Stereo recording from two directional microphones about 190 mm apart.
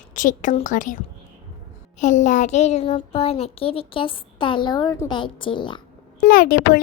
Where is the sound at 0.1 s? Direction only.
40° left (ahead or behind).